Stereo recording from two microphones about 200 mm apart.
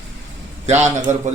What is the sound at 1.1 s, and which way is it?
Speech, 35° right (ahead or behind).